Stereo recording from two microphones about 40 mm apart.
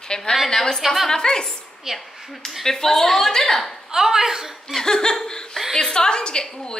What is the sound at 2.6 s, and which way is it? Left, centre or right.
A woman's voice, centre.